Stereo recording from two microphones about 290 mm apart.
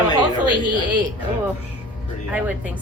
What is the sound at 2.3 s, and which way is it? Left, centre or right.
Speech, centre.